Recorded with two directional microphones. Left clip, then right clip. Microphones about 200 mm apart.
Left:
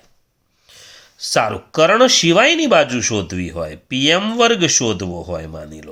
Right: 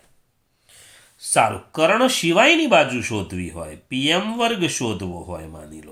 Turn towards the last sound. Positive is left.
turn(degrees=50)  # may be behind; listen again after turning